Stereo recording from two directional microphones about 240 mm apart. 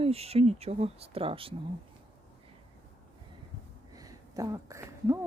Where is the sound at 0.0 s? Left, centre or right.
Right.